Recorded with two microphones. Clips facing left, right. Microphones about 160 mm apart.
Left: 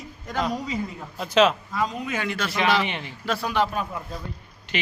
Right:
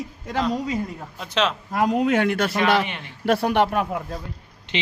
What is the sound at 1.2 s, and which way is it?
Speech, 5° left (ahead or behind).